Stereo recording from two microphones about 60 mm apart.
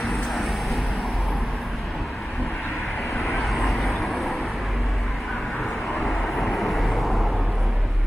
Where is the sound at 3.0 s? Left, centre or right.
Centre.